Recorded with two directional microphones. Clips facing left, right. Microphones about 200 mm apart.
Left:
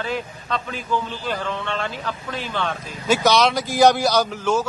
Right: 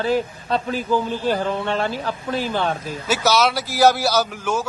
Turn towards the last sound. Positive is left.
turn(degrees=-10)  # may be behind; listen again after turning